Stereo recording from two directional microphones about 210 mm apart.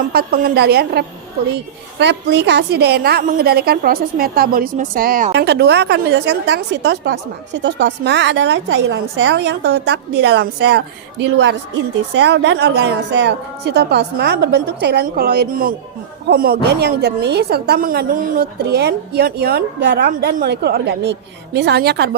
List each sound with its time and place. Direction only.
0.1 s a woman's voice: 45° right (ahead or behind)
12.1 s a woman's voice: 55° right (ahead or behind)